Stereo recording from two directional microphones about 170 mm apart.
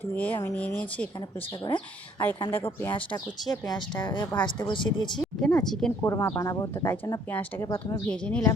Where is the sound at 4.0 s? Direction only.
25° left (ahead or behind).